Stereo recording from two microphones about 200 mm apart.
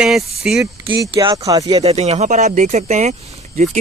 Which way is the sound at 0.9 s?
20° right (ahead or behind).